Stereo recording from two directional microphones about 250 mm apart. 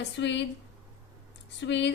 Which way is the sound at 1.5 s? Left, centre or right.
Left.